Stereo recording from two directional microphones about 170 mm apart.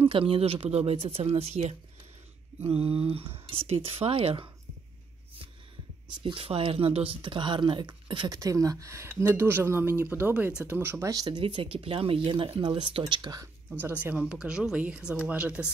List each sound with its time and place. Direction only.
0.0 s speech: 30° right (ahead or behind)
6.2 s speech: 30° right (ahead or behind)
13.7 s speech: 10° right (ahead or behind)